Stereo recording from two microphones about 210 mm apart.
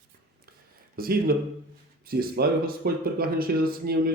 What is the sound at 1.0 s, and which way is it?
Speech, 45° right (ahead or behind).